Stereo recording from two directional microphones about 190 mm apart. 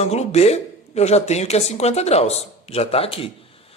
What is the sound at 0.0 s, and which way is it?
Speech, 35° left (ahead or behind).